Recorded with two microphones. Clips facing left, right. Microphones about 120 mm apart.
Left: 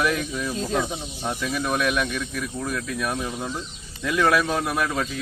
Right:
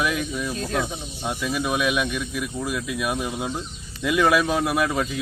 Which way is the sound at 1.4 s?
5° right (ahead or behind).